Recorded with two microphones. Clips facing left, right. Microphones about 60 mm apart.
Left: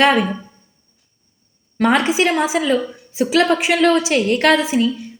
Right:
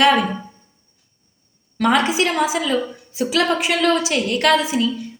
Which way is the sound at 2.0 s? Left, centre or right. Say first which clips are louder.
Left 2 dB; left.